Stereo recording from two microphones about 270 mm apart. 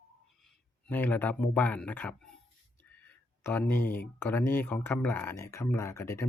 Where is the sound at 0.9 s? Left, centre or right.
Centre.